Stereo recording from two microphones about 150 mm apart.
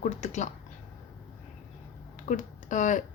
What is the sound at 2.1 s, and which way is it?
Speech, 55° left (ahead or behind).